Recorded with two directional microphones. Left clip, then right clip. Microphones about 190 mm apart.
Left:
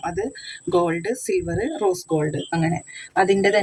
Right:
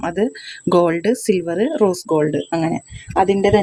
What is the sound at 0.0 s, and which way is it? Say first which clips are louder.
Speech: right 6 dB; 55° right (ahead or behind).